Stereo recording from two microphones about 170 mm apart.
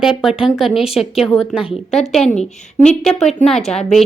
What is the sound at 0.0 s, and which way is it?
Speech, centre (ahead or behind).